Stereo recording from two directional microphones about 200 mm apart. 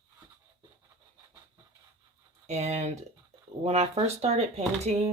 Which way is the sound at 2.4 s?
35° right (ahead or behind).